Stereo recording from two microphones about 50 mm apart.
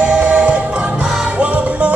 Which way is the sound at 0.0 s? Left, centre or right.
Right.